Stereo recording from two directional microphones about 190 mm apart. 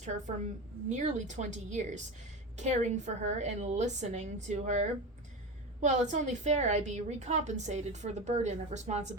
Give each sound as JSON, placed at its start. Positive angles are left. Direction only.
{"t": 0.0, "sound": "a woman's voice", "side_deg": -40}